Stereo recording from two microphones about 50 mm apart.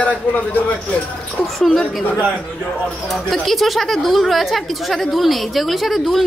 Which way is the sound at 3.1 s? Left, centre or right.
Centre.